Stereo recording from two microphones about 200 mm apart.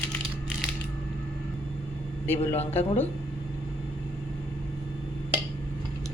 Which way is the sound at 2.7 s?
30° left (ahead or behind).